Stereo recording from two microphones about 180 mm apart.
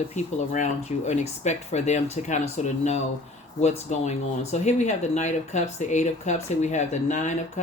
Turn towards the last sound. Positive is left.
turn(degrees=40)  # may be behind; listen again after turning